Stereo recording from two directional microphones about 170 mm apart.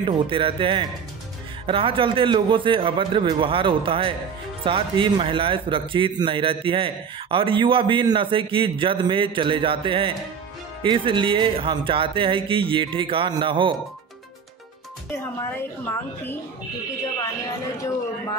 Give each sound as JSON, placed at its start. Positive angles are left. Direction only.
{"t": 0.0, "sound": "a man's voice", "side_deg": -30}